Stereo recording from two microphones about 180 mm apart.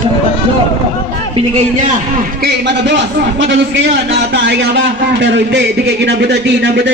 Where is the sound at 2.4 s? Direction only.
75° right (ahead or behind).